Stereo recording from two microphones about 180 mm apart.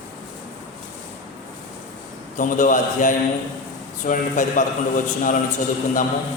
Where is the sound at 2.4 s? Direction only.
45° left (ahead or behind).